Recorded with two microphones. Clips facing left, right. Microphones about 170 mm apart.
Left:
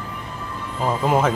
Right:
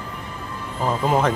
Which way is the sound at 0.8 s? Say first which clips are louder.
Left 1 dB; 5° left (ahead or behind).